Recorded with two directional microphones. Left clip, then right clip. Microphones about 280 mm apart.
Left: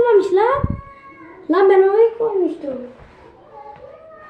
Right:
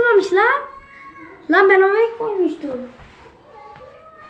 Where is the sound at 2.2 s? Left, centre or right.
Right.